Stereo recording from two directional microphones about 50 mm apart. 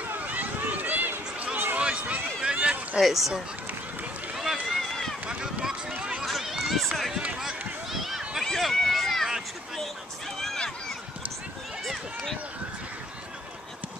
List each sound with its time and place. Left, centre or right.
0.0 s run: right
2.5 s a sound: right
3.0 s speech: centre
4.4 s run: centre
5.4 s a sound: centre
5.9 s run: right
6.2 s run: centre
8.5 s run: centre